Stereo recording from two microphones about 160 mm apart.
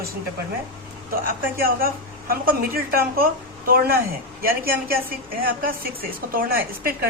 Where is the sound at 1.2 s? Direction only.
65° right (ahead or behind).